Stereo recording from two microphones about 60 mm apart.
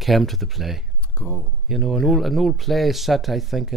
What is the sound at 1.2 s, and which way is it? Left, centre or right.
Speech, left.